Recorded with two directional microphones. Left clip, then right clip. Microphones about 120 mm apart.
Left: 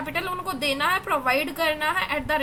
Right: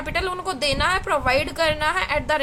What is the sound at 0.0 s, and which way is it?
A woman's voice, 45° right (ahead or behind).